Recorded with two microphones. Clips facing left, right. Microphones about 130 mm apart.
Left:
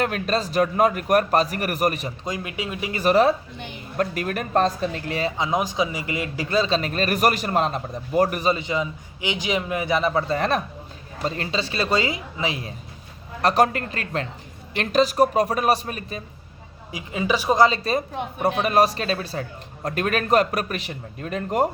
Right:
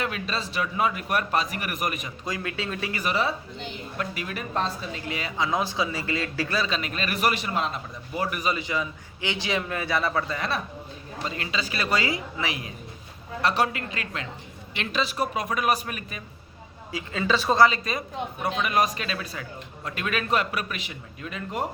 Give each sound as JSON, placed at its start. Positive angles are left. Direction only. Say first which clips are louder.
{"t": 0.0, "sound": "a woman's voice", "louder": "left 7 dB", "side_deg": 50}
{"t": 2.2, "sound": "a man's voice", "louder": "even", "side_deg": 20}
{"t": 3.0, "sound": "a woman's voice", "louder": "left 11 dB", "side_deg": 45}
{"t": 5.4, "sound": "a man's voice", "louder": "even", "side_deg": 20}
{"t": 10.3, "sound": "a man's voice", "louder": "left 7 dB", "side_deg": 40}
{"t": 13.4, "sound": "a woman's voice", "louder": "left 6 dB", "side_deg": 45}
{"t": 16.9, "sound": "a woman's voice", "louder": "left 2 dB", "side_deg": 20}
{"t": 17.7, "sound": "a man's voice", "louder": "left 6 dB", "side_deg": 35}